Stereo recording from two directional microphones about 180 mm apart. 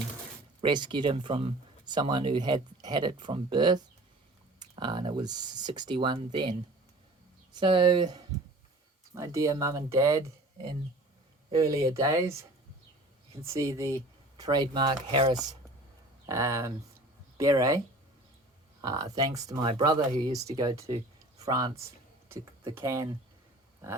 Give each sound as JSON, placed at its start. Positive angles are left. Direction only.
{"t": 0.6, "sound": "speech", "side_deg": -25}
{"t": 7.6, "sound": "speech", "side_deg": -30}
{"t": 16.2, "sound": "speech", "side_deg": -15}
{"t": 18.8, "sound": "speech", "side_deg": -20}
{"t": 22.8, "sound": "speech", "side_deg": -15}